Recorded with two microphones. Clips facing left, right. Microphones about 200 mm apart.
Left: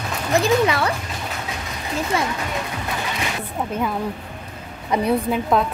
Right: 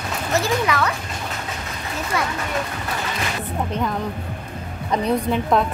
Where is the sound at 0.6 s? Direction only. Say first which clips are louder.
Left 1 dB; 30° left (ahead or behind).